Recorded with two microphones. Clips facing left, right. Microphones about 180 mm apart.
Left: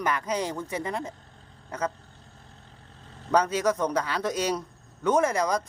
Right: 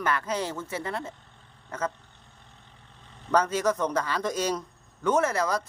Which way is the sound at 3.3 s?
10° left (ahead or behind).